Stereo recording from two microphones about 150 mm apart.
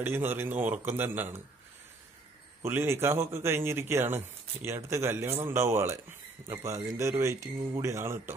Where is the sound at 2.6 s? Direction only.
15° right (ahead or behind).